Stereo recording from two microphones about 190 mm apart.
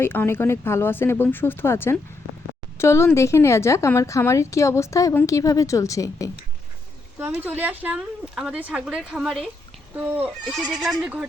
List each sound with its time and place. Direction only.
0.0 s a woman's voice: 10° left (ahead or behind)
7.2 s speech: 10° right (ahead or behind)